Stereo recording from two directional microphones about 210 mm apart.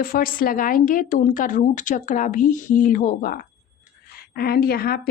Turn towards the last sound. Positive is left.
turn(degrees=45)  # may be behind; listen again after turning